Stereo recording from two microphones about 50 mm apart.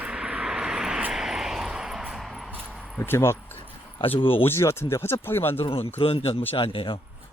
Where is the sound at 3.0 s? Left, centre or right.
Left.